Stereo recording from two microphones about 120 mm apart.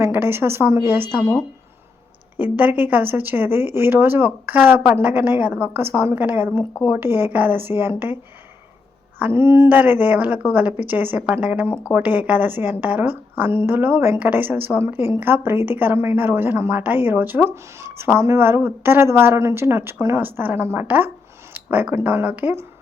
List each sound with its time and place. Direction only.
0.0 s a woman's voice: 20° right (ahead or behind)
2.4 s a woman's voice: 15° right (ahead or behind)